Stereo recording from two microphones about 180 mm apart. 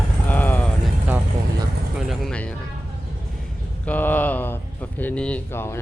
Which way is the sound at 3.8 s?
10° left (ahead or behind).